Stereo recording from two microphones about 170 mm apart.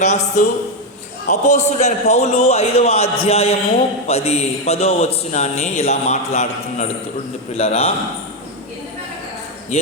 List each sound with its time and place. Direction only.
0.0 s a man's voice: 40° left (ahead or behind)
9.7 s a man's voice: 40° left (ahead or behind)